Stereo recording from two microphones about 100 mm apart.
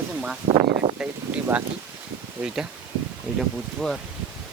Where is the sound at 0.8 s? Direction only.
90° right.